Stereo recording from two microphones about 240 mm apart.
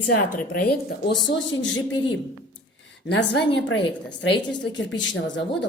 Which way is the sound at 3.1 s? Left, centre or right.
Left.